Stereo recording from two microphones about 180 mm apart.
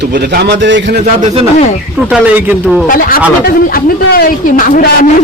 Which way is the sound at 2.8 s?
50° left (ahead or behind).